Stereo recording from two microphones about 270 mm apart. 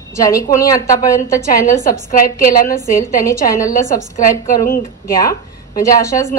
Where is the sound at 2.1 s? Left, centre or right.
Left.